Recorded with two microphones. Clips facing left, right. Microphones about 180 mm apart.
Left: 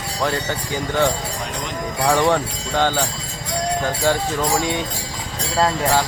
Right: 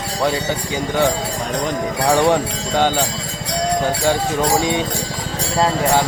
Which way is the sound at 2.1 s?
15° right (ahead or behind).